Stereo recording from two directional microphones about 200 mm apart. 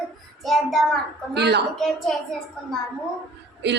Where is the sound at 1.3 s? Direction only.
55° right (ahead or behind).